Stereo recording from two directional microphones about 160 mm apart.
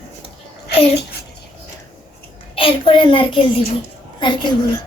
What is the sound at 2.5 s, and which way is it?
Speech, 35° left (ahead or behind).